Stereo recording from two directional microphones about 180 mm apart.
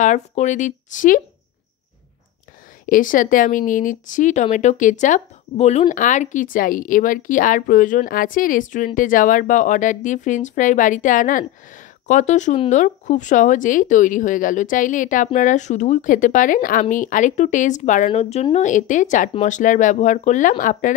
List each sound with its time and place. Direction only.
0.0 s speech: 40° left (ahead or behind)
2.9 s speech: 50° left (ahead or behind)